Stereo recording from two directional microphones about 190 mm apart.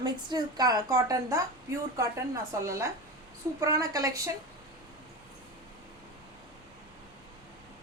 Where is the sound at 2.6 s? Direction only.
15° right (ahead or behind).